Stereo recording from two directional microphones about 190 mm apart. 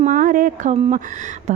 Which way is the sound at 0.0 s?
45° right (ahead or behind).